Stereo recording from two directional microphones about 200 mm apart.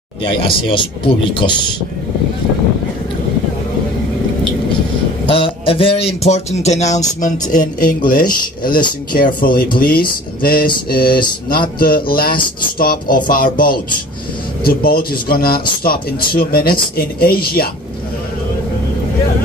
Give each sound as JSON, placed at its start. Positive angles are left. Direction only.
{"t": 0.2, "sound": "speech", "side_deg": 25}
{"t": 5.3, "sound": "speech", "side_deg": 25}